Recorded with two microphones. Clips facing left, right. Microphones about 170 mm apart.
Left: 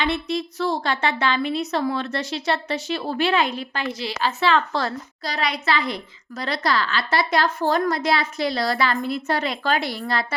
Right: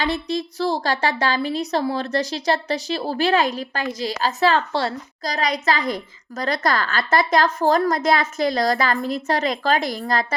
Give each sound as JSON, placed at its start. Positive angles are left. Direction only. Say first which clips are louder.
{"t": 0.0, "sound": "a woman's voice", "louder": "right 1 dB", "side_deg": -35}